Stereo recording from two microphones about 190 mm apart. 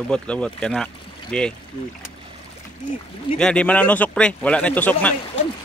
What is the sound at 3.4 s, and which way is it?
A man's voice, 5° left (ahead or behind).